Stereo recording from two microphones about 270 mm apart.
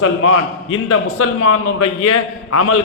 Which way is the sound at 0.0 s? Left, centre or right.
Left.